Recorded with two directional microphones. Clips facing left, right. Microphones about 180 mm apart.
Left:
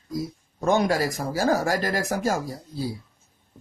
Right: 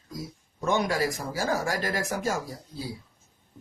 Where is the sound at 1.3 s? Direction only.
40° left (ahead or behind).